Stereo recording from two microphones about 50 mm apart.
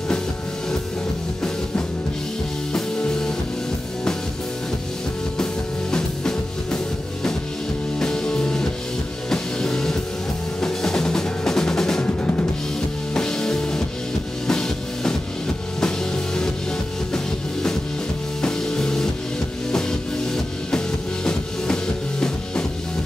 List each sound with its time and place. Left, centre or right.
2.7 s music: centre
5.4 s music: centre
8.0 s music: centre
13.1 s music: centre
18.4 s music: centre
20.7 s music: centre